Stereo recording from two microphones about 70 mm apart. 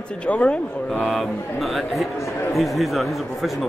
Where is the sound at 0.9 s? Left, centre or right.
Centre.